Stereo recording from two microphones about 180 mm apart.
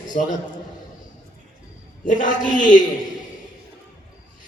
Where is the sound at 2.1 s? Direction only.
45° left (ahead or behind).